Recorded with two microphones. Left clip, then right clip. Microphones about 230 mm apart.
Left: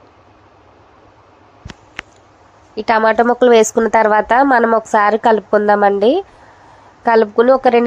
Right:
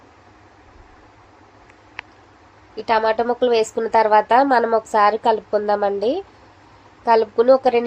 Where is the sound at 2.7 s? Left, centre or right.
Left.